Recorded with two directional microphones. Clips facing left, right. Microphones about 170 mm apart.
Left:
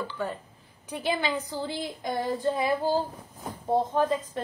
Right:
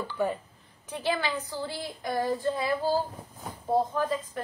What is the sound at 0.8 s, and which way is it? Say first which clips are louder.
Speech: left 1 dB; 15° left (ahead or behind).